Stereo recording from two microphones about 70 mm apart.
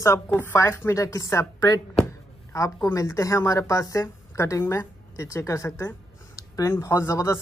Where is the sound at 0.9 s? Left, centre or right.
Left.